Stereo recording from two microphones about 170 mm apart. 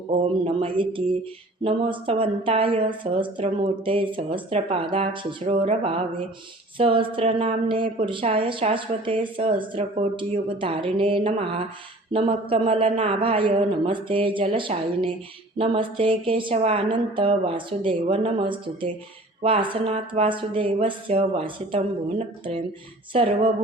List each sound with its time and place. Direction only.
0.1 s a woman's voice: 35° right (ahead or behind)
23.1 s a woman's voice: 35° right (ahead or behind)